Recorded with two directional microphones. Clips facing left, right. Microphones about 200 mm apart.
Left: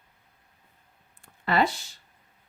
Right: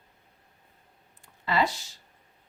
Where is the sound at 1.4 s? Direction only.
55° left (ahead or behind).